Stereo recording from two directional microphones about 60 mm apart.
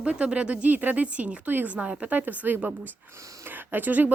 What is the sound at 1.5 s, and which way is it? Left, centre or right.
Speech, right.